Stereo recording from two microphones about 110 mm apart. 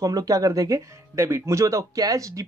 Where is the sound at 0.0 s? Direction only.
30° right (ahead or behind).